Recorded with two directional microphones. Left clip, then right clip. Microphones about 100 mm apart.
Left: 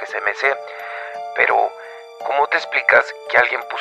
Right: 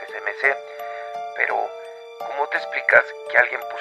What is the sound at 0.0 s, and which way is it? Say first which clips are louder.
Music: left 3 dB; 35° left (ahead or behind).